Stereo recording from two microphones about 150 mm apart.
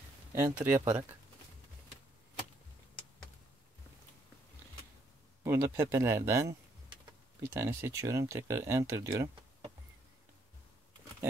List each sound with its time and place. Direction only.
0.3 s speech: 15° right (ahead or behind)
5.4 s speech: 20° right (ahead or behind)
7.4 s speech: 15° right (ahead or behind)